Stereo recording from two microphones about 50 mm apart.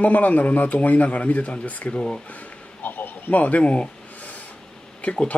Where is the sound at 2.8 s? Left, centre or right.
Left.